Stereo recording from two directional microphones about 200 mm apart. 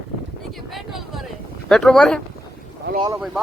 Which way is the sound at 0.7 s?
Centre (ahead or behind).